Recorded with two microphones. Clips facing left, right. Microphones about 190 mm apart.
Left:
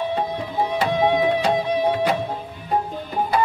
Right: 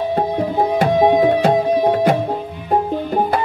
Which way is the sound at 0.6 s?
45° right (ahead or behind).